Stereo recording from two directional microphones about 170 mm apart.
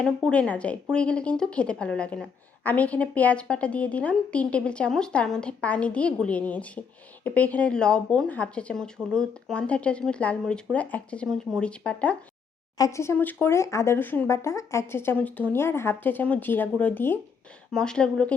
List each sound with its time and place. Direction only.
0.0 s speech: 5° left (ahead or behind)
12.7 s a woman's voice: 20° left (ahead or behind)